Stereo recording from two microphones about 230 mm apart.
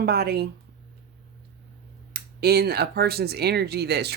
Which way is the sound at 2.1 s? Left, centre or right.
Right.